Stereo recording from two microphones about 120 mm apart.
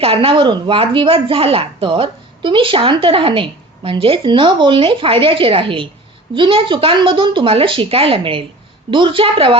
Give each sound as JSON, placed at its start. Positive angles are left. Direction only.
{"t": 0.0, "sound": "speech", "side_deg": -50}